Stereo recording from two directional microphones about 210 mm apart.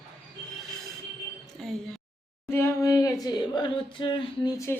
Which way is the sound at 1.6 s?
Centre (ahead or behind).